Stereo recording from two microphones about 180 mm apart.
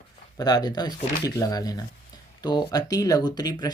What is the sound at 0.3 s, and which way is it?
Speech, 20° left (ahead or behind).